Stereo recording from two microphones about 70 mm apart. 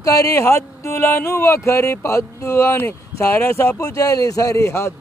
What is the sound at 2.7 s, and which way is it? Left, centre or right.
Speech, left.